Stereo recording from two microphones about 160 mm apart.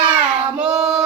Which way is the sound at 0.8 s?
Centre (ahead or behind).